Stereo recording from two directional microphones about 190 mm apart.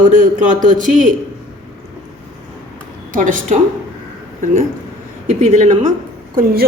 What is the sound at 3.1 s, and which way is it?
Speech, 45° right (ahead or behind).